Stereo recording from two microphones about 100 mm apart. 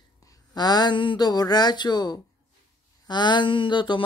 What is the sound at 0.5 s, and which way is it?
Speech, 45° left (ahead or behind).